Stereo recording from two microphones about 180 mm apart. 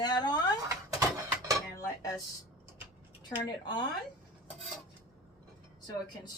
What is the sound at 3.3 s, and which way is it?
Speech, 25° left (ahead or behind).